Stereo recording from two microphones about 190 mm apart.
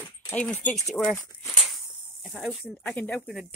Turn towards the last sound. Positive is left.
turn(degrees=5)  # may be behind; listen again after turning